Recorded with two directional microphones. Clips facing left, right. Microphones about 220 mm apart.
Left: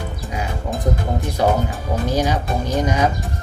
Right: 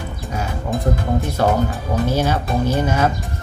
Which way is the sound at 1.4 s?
15° left (ahead or behind).